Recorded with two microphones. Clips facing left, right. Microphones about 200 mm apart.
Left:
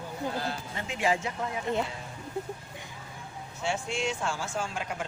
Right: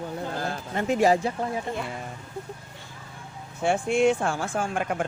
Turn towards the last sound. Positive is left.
turn(degrees=-55)  # may be behind; listen again after turning